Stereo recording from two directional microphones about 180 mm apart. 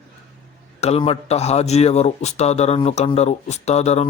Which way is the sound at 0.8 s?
35° left (ahead or behind).